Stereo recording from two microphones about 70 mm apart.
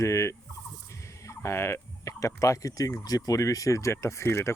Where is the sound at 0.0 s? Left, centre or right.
Left.